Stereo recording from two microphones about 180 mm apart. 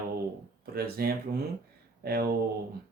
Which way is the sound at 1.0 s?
55° right (ahead or behind).